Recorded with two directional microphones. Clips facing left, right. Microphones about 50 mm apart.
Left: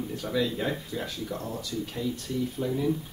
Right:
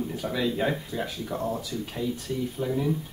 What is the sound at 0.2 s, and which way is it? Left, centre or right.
Speech, centre.